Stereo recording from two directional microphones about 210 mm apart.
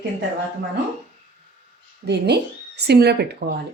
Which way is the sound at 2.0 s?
50° right (ahead or behind).